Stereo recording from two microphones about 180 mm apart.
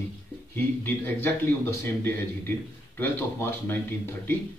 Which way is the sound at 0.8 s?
10° left (ahead or behind).